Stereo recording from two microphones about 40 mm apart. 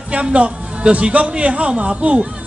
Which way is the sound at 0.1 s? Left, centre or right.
Right.